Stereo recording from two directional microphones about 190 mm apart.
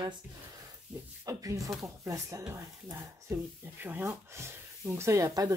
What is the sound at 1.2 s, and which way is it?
Speech, 15° right (ahead or behind).